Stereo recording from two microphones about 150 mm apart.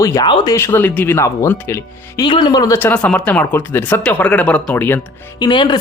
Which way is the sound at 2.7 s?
10° left (ahead or behind).